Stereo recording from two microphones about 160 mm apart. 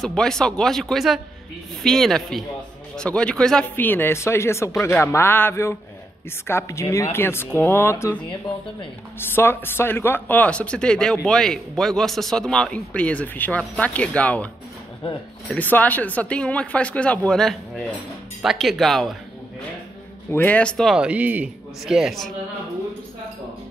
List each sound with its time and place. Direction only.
0.0 s a man's voice: 5° left (ahead or behind)
9.3 s a man's voice: 15° left (ahead or behind)
15.5 s a man's voice: 10° left (ahead or behind)
20.2 s speech: 10° left (ahead or behind)